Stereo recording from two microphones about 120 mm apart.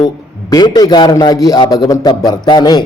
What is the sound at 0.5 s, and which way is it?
A man's voice, 35° left (ahead or behind).